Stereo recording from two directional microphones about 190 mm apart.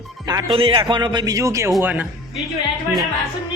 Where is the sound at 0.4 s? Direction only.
25° right (ahead or behind); by 2.0 s 10° right (ahead or behind).